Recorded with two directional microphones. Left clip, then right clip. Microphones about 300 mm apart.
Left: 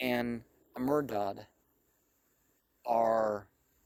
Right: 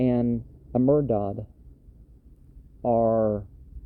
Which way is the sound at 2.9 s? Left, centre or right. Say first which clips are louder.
Right 6 dB; left.